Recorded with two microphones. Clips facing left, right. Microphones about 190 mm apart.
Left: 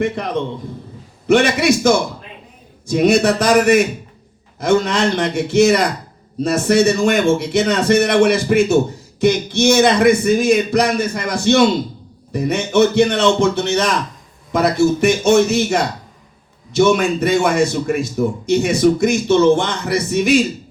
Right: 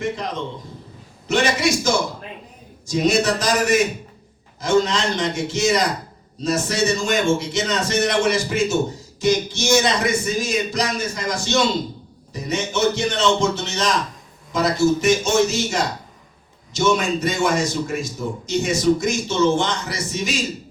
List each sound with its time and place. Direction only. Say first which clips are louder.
1.3 s a man's voice: left 6 dB; 60° left (ahead or behind)